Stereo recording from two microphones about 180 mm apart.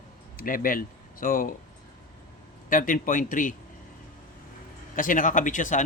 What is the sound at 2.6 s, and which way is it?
Speech, 50° left (ahead or behind).